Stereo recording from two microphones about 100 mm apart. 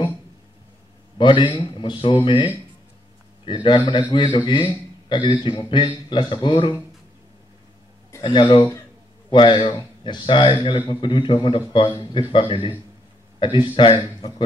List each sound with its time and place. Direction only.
1.1 s a man's voice: 55° left (ahead or behind)
8.3 s a man's voice: 55° left (ahead or behind)